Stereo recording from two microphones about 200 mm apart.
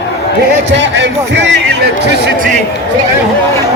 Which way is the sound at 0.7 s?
65° right (ahead or behind).